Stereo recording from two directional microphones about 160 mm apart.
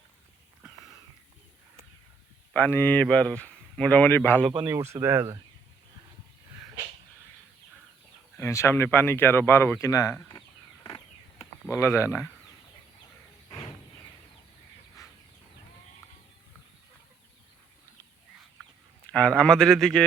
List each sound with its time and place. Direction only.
2.5 s speech: 10° left (ahead or behind)
4.6 s speech: 15° right (ahead or behind)
8.4 s speech: 15° left (ahead or behind)
11.7 s speech: 15° left (ahead or behind)
19.0 s speech: 10° left (ahead or behind)